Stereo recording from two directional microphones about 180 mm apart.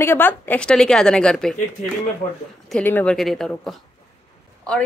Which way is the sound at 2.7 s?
10° left (ahead or behind).